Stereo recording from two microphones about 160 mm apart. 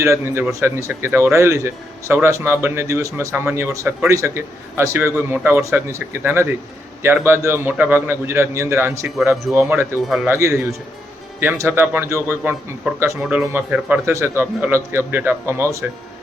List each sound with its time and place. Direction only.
0.0 s speech: 15° right (ahead or behind)
9.3 s speech: centre (ahead or behind)
9.6 s speech: 15° right (ahead or behind)
10.1 s speech: 5° right (ahead or behind)
10.3 s speech: 15° right (ahead or behind)